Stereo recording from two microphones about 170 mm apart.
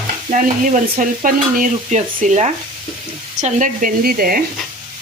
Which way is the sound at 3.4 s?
45° right (ahead or behind).